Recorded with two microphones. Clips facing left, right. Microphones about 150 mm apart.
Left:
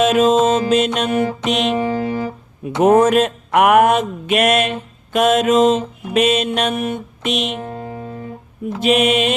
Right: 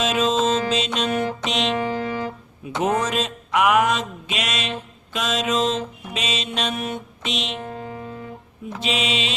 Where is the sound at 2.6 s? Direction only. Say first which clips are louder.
Left 10 dB; 55° left (ahead or behind).